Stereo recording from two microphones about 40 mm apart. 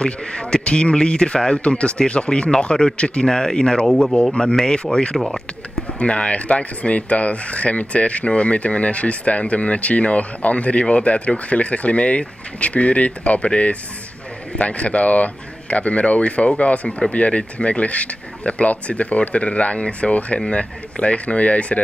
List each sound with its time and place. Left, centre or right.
0.0 s a man's voice: left
5.1 s speech: centre
5.9 s speech: left